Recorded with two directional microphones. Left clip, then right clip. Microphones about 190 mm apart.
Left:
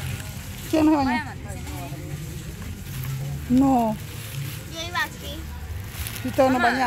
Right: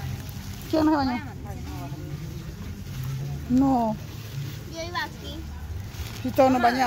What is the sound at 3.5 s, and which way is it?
Speech, 10° left (ahead or behind).